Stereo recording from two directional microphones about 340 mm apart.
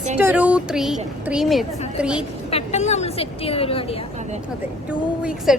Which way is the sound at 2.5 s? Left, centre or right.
Centre.